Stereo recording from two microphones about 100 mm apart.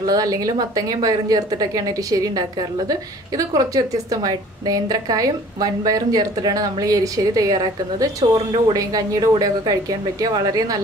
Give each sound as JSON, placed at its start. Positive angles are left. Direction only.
{"t": 0.0, "sound": "a woman's voice", "side_deg": -40}